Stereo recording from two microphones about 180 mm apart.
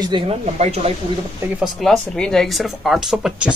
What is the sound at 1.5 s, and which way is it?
Speech, centre (ahead or behind).